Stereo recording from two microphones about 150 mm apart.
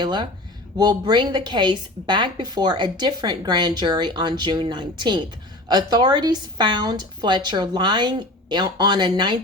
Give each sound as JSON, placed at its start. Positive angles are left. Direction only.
{"t": 0.0, "sound": "a woman's voice", "side_deg": -30}